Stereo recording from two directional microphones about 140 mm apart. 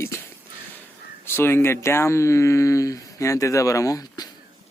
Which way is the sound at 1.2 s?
15° left (ahead or behind).